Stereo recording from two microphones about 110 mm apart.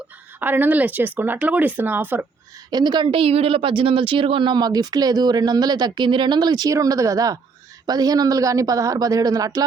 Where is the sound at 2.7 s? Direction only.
40° right (ahead or behind).